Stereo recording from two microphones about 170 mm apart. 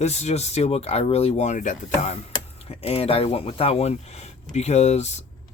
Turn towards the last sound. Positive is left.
turn(degrees=40)  # may be behind; listen again after turning